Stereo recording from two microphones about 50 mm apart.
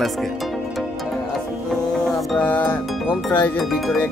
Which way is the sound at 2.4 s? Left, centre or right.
Left.